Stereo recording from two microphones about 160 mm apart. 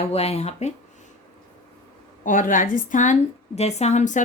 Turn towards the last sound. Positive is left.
turn(degrees=50)  # may be behind; listen again after turning